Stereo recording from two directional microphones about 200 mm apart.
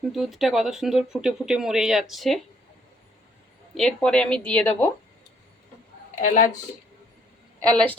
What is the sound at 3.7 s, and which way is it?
Speech, 5° left (ahead or behind).